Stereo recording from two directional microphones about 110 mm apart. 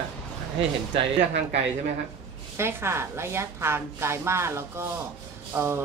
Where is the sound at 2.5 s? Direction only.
25° right (ahead or behind).